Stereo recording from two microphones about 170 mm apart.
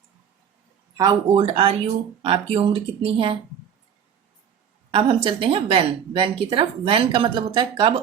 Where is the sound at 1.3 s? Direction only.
35° right (ahead or behind).